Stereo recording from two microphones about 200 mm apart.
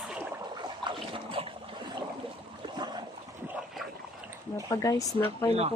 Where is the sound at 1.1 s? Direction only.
25° right (ahead or behind).